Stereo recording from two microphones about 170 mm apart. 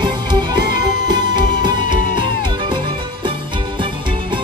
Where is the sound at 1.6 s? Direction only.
25° right (ahead or behind).